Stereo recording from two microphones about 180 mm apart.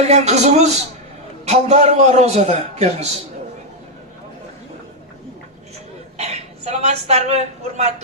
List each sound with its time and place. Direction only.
0.0 s a man's voice: 40° right (ahead or behind)
6.1 s a woman's voice: 35° right (ahead or behind)